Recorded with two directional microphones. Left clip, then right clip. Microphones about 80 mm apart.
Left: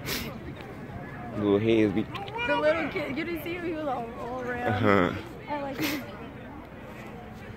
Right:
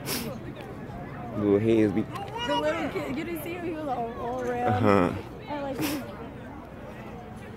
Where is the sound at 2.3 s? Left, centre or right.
Right.